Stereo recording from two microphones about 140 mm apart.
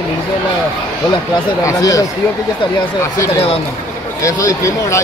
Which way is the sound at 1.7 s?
25° left (ahead or behind).